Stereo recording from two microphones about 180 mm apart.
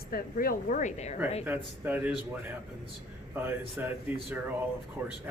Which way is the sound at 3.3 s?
10° right (ahead or behind).